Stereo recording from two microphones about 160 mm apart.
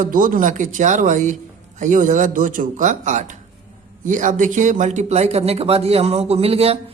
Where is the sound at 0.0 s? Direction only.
60° right (ahead or behind).